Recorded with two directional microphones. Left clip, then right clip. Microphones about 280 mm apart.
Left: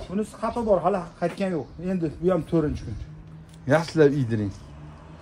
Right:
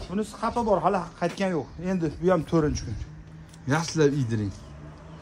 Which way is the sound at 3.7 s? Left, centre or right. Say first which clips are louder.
Left 4 dB; centre.